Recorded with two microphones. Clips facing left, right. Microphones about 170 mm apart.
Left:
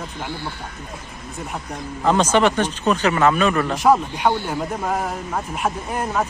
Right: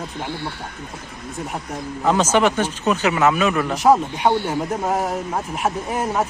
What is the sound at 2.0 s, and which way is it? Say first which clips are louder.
Speech: even; 5° right (ahead or behind).